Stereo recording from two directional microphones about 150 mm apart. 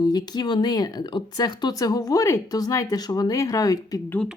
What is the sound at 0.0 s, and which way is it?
Speech, 25° left (ahead or behind).